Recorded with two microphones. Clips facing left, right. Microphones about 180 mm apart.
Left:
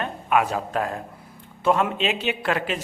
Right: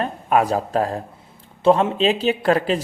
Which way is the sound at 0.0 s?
35° right (ahead or behind).